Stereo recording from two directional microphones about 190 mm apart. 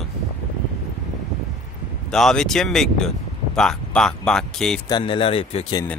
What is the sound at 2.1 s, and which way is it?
Speech, 5° left (ahead or behind).